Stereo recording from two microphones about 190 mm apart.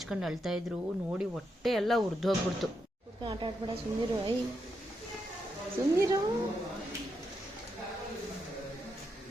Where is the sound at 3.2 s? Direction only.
25° right (ahead or behind).